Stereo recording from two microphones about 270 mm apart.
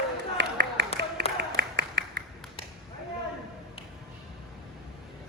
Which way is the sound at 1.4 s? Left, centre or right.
Right.